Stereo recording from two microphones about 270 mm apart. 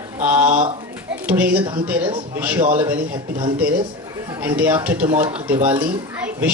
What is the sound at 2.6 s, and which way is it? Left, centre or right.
Speech, right.